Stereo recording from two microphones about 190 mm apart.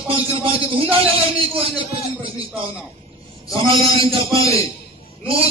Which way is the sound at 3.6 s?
30° right (ahead or behind).